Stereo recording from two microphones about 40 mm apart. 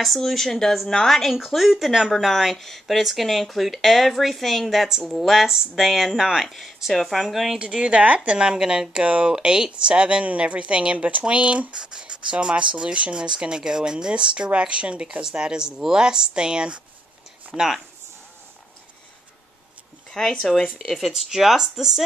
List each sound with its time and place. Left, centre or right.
0.0 s a woman's voice: centre
1.3 s speech: centre
6.5 s speech: centre
7.2 s speech: centre
7.5 s speech: right
17.6 s speech: centre
20.1 s speech: centre
20.9 s speech: centre